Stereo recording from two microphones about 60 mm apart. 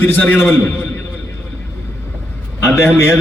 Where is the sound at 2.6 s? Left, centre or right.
Left.